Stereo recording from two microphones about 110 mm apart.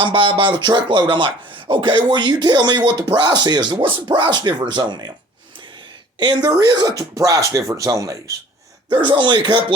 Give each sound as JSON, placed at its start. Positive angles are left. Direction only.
{"t": 0.0, "sound": "speech", "side_deg": -50}
{"t": 6.1, "sound": "speech", "side_deg": -40}
{"t": 8.9, "sound": "speech", "side_deg": -45}